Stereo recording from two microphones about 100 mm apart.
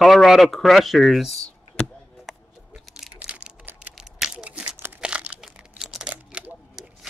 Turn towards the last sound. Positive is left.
turn(degrees=-10)  # may be behind; listen again after turning